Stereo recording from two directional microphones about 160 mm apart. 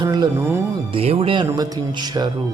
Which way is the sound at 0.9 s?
35° right (ahead or behind).